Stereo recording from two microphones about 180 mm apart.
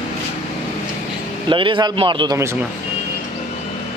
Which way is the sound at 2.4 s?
15° right (ahead or behind).